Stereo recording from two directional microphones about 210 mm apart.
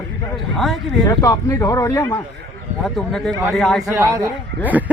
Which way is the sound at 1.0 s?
15° left (ahead or behind).